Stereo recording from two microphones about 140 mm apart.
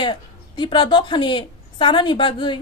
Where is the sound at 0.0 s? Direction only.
35° left (ahead or behind).